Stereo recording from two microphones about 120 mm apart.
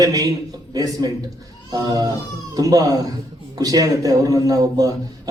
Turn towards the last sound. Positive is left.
turn(degrees=-30)  # may be behind; listen again after turning